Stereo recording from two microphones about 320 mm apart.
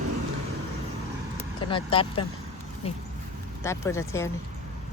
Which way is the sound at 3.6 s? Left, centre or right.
Centre.